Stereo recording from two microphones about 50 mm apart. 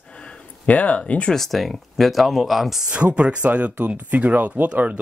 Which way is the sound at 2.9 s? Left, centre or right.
Right.